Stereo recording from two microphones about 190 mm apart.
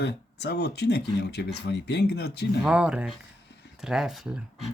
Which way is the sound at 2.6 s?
5° right (ahead or behind).